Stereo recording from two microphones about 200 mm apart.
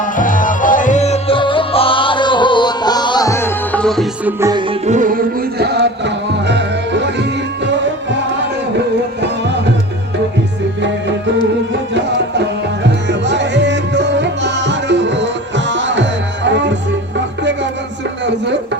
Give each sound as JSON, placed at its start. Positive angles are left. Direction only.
{"t": 0.0, "sound": "music", "side_deg": 40}
{"t": 4.3, "sound": "music", "side_deg": -15}
{"t": 4.9, "sound": "music", "side_deg": -40}
{"t": 12.4, "sound": "music", "side_deg": -60}